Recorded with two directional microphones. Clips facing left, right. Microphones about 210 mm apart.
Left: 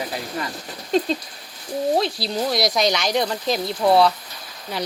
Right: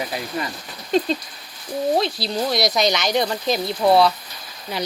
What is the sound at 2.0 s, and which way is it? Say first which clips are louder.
Speech: even; 5° left (ahead or behind).